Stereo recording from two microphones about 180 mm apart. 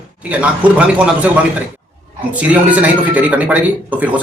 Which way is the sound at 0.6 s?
10° right (ahead or behind).